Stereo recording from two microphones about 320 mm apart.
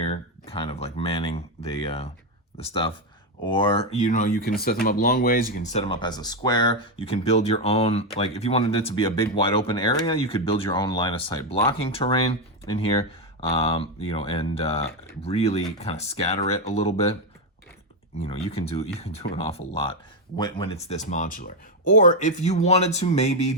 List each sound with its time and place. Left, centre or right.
0.1 s a sound: centre
2.6 s speech: centre
18.2 s speech: centre